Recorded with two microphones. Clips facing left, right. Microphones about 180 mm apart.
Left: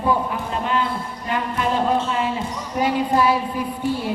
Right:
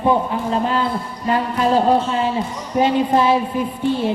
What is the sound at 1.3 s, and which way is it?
Speech, 35° right (ahead or behind).